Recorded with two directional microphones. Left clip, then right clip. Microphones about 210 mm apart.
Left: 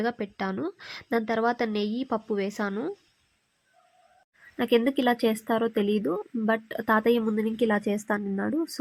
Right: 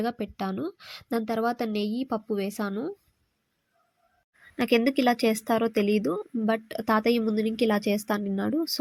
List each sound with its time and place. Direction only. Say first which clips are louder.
0.0 s a woman's voice: left 1 dB; 15° right (ahead or behind)
4.5 s speech: even; 25° right (ahead or behind)